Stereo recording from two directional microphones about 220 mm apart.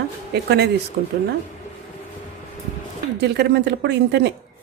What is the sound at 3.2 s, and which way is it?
Speech, 50° right (ahead or behind).